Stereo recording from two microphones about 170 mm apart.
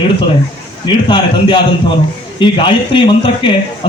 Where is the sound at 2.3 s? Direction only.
30° left (ahead or behind).